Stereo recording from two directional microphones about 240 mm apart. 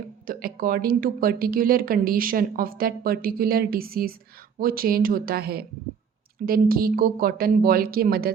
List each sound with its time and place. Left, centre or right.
0.3 s speech: right